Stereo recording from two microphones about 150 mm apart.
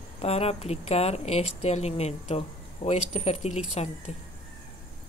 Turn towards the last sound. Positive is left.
turn(degrees=45)  # may be behind; listen again after turning